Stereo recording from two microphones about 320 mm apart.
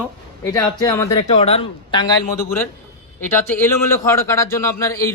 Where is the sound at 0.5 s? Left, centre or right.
Centre.